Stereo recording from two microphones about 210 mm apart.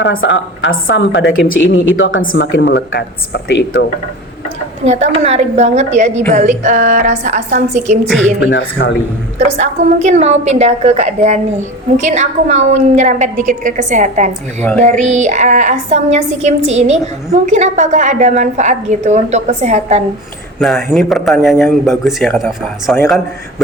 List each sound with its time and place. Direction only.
0.0 s a woman's voice: 60° left (ahead or behind)
4.9 s a woman's voice: 30° right (ahead or behind)
8.4 s a woman's voice: 60° left (ahead or behind)
9.6 s a woman's voice: 35° right (ahead or behind)
20.6 s a man's voice: centre (ahead or behind)